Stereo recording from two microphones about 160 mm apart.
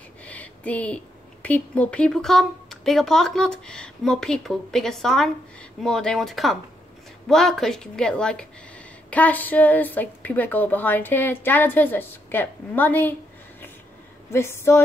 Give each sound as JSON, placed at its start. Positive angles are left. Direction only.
{"t": 0.2, "sound": "speech", "side_deg": 10}
{"t": 14.3, "sound": "speech", "side_deg": 15}